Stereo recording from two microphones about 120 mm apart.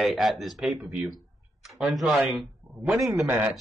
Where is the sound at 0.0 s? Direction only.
Centre (ahead or behind).